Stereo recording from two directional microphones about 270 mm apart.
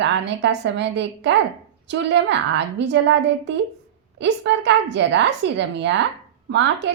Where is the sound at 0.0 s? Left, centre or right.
Right.